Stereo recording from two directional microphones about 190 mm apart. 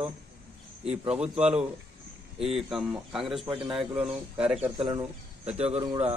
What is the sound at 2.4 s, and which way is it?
Speech, centre (ahead or behind).